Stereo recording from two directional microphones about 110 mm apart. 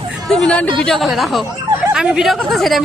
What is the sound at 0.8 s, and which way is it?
Speech, centre (ahead or behind).